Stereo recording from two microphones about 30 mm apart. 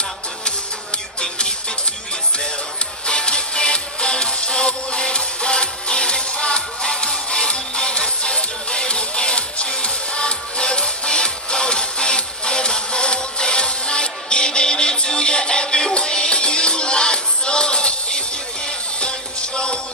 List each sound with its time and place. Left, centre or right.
3.1 s music: left